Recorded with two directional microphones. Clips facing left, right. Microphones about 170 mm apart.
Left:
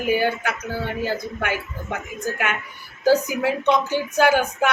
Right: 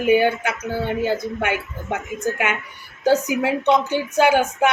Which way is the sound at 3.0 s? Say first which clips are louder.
Even; 20° right (ahead or behind).